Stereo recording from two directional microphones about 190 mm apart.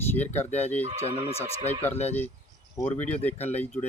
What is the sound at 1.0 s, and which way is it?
Speech, 30° left (ahead or behind).